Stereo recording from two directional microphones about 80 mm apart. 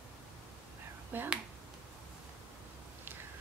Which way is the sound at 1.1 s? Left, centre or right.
Right.